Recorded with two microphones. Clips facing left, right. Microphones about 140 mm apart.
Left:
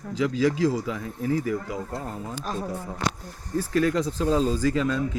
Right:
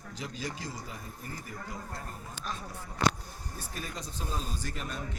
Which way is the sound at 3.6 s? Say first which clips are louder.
Left 19 dB; 90° left.